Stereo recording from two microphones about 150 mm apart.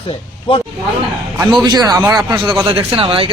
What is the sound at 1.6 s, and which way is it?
Speech, 25° right (ahead or behind).